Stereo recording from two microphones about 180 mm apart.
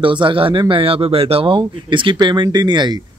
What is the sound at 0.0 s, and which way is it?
Speech, 30° right (ahead or behind).